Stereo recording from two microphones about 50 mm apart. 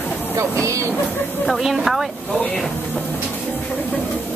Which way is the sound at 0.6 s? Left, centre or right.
Right.